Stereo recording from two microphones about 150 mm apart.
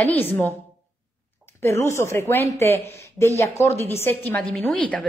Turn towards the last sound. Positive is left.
turn(degrees=10)  # may be behind; listen again after turning